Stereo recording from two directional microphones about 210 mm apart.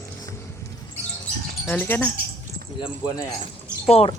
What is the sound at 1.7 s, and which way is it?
Speech, 10° left (ahead or behind).